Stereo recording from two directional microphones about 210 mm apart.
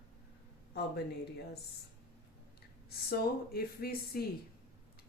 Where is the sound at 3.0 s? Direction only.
50° left (ahead or behind).